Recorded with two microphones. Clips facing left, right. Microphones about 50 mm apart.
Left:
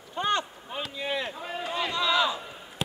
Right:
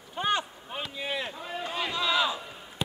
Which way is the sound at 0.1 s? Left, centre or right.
Centre.